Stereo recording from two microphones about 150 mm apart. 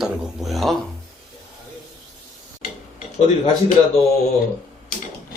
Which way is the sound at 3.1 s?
45° left (ahead or behind).